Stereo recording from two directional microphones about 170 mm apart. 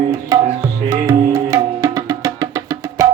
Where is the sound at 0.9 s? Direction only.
20° right (ahead or behind).